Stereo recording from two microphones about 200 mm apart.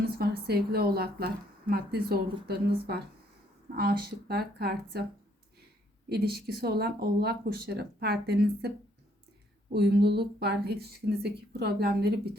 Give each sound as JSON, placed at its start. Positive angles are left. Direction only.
{"t": 0.0, "sound": "a woman's voice", "side_deg": -50}
{"t": 6.1, "sound": "speech", "side_deg": -50}
{"t": 9.7, "sound": "speech", "side_deg": -55}